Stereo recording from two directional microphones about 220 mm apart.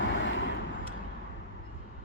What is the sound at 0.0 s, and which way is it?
Vehicle, 60° left (ahead or behind).